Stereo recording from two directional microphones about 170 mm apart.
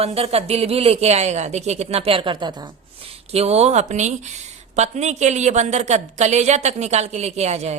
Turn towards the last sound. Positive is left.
turn(degrees=-40)  # may be behind; listen again after turning